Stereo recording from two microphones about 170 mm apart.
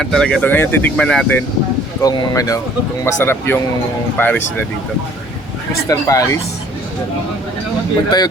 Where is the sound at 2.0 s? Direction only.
25° left (ahead or behind).